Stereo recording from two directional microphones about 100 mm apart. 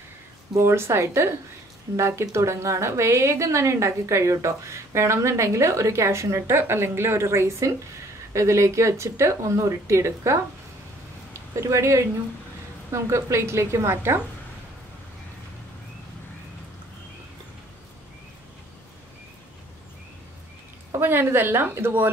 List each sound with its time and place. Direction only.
0.6 s a woman's voice: 25° right (ahead or behind)
11.5 s a woman's voice: 30° right (ahead or behind)
20.9 s a woman's voice: 20° right (ahead or behind)